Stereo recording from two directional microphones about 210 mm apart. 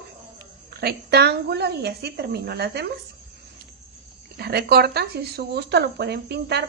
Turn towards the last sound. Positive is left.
turn(degrees=-50)  # may be behind; listen again after turning